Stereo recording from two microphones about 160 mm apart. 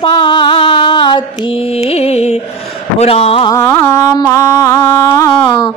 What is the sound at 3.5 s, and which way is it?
Child singing, 15° left (ahead or behind).